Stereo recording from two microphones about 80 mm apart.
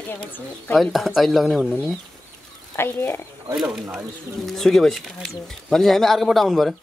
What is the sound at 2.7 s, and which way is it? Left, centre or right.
Speech, left.